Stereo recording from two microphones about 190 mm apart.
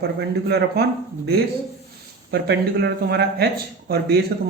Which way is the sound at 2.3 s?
60° right (ahead or behind).